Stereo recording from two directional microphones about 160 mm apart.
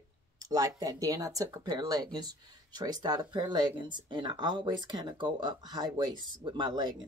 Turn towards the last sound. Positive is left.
turn(degrees=-30)  # may be behind; listen again after turning